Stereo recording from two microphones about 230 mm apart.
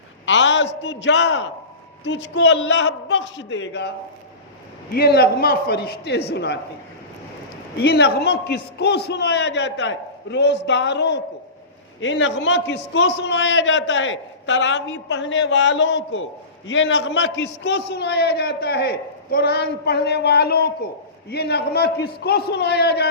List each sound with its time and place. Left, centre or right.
0.3 s a sound: left
0.8 s a man's voice: left
7.8 s a man's voice: left